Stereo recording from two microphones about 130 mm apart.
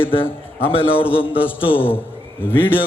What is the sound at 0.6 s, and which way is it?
Speech, 45° left (ahead or behind).